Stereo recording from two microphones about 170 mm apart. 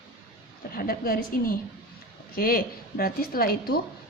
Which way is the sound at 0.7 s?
60° left (ahead or behind).